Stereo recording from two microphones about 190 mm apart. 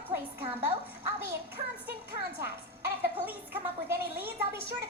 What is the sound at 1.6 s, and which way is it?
Music, 30° right (ahead or behind).